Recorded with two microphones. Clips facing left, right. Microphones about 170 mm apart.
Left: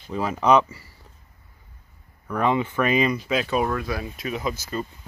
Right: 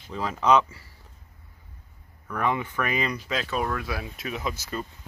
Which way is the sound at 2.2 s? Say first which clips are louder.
Left 5 dB; 20° left (ahead or behind).